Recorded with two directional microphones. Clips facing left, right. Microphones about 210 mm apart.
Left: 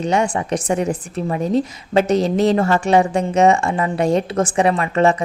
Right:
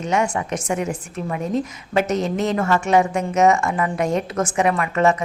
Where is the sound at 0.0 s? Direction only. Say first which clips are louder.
Left 3 dB; 30° left (ahead or behind).